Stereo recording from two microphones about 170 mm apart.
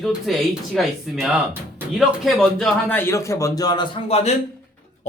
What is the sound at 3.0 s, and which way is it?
A man's voice, 15° left (ahead or behind).